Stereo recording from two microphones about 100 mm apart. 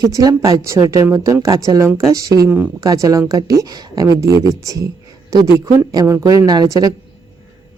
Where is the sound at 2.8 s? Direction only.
40° right (ahead or behind).